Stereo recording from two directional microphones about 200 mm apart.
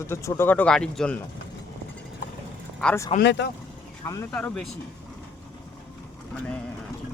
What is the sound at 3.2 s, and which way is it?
Speech, 60° left (ahead or behind).